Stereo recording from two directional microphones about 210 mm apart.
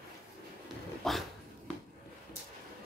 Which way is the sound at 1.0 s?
Centre (ahead or behind).